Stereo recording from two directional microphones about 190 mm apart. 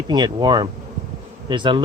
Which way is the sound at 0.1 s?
20° right (ahead or behind).